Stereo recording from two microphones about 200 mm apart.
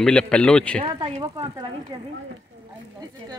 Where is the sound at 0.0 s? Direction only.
5° left (ahead or behind).